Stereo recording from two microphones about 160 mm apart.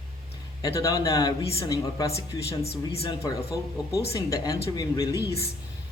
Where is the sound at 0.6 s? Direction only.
20° left (ahead or behind).